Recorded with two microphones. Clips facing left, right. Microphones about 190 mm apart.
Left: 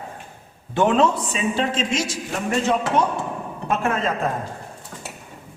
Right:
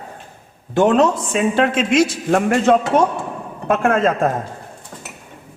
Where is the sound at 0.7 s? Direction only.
40° right (ahead or behind).